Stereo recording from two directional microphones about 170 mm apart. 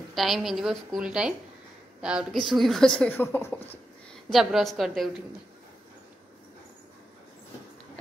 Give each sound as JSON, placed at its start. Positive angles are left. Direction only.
{"t": 0.1, "sound": "speech", "side_deg": 0}
{"t": 4.3, "sound": "speech", "side_deg": 0}